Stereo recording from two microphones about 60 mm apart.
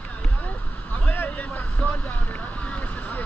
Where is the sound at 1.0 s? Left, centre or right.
Left.